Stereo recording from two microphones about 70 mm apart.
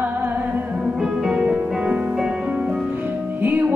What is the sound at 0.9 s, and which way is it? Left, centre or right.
Music, centre.